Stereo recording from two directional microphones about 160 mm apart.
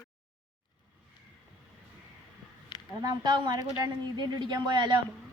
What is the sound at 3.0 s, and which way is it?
Speech, 25° right (ahead or behind).